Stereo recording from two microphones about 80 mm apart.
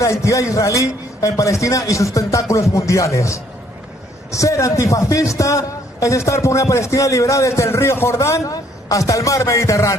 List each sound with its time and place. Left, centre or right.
0.0 s a man's voice: left